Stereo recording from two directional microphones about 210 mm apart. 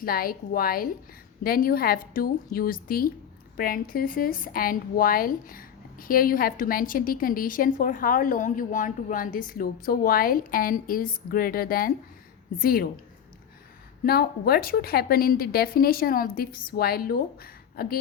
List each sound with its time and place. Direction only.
0.0 s a woman's voice: 45° left (ahead or behind)
14.0 s a woman's voice: 45° left (ahead or behind)